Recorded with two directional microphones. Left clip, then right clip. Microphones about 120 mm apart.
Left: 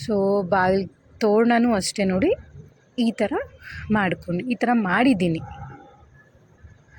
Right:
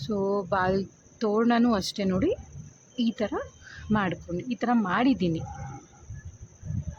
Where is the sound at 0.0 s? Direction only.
20° left (ahead or behind).